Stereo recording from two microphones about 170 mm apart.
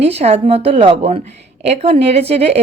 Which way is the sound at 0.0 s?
35° right (ahead or behind).